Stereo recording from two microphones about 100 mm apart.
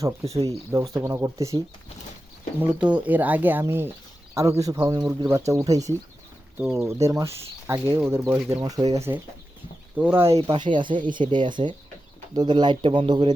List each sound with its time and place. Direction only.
0.0 s speech: 35° right (ahead or behind)
2.6 s speech: 15° right (ahead or behind)
4.4 s speech: 35° right (ahead or behind)
8.4 s speech: 35° right (ahead or behind)
10.0 s speech: 20° right (ahead or behind)
10.4 s speech: 55° right (ahead or behind)